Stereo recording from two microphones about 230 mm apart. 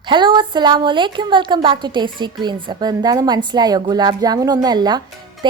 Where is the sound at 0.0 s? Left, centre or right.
Centre.